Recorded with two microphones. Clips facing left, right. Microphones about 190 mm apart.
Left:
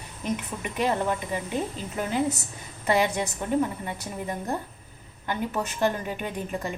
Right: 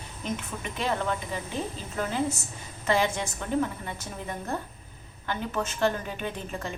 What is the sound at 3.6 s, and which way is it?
Speech, 15° left (ahead or behind).